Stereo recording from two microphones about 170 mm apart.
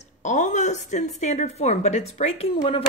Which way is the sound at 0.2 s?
45° left (ahead or behind).